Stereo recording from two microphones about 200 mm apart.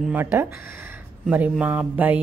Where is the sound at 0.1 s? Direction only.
10° right (ahead or behind).